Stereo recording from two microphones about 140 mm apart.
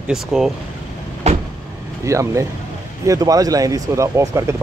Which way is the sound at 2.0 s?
20° right (ahead or behind).